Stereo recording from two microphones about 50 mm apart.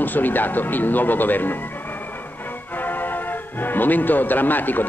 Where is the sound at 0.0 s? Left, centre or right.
Left.